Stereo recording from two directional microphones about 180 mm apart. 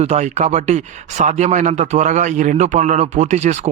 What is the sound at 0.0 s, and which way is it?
A man's voice, 40° right (ahead or behind).